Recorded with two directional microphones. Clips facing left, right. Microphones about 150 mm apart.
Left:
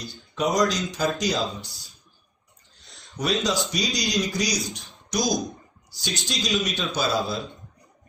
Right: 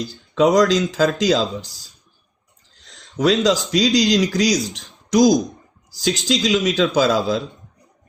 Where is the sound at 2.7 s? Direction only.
90° right.